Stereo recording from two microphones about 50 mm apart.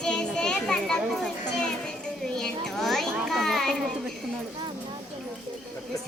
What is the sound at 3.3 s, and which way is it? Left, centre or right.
Children playing, centre.